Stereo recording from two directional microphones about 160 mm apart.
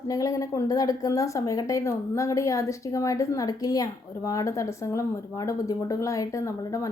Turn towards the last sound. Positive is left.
turn(degrees=20)  # may be behind; listen again after turning